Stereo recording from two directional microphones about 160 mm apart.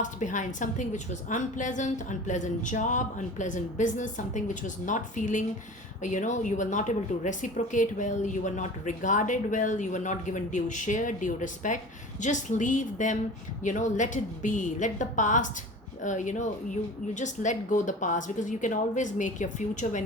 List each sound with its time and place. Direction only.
0.0 s a woman's voice: 50° left (ahead or behind)